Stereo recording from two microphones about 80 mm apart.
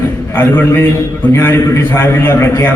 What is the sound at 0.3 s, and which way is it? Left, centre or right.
A man's voice, left.